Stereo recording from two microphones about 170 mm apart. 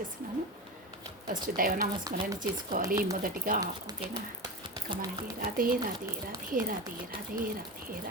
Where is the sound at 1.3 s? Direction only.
55° right (ahead or behind).